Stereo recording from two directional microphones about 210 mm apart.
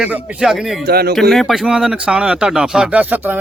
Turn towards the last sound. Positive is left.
turn(degrees=-5)  # may be behind; listen again after turning